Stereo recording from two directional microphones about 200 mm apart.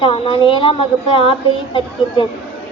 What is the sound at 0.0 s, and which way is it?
A woman's voice, 25° left (ahead or behind).